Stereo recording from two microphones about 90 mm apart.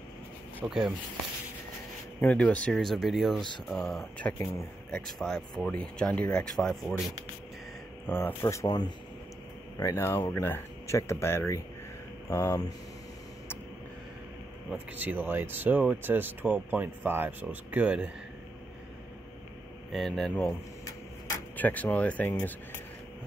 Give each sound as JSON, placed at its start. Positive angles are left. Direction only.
{"t": 0.7, "sound": "speech", "side_deg": -5}
{"t": 2.2, "sound": "speech", "side_deg": 15}
{"t": 4.4, "sound": "speech", "side_deg": 30}
{"t": 5.0, "sound": "speech", "side_deg": 0}
{"t": 5.7, "sound": "speech", "side_deg": 10}
{"t": 8.1, "sound": "speech", "side_deg": 25}
{"t": 8.6, "sound": "speech", "side_deg": 50}
{"t": 9.8, "sound": "speech", "side_deg": 30}
{"t": 15.0, "sound": "speech", "side_deg": -20}
{"t": 19.9, "sound": "speech", "side_deg": 5}
{"t": 21.5, "sound": "speech", "side_deg": 20}